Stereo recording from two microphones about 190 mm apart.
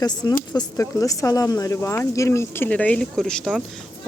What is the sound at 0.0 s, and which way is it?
A woman's voice, 20° left (ahead or behind).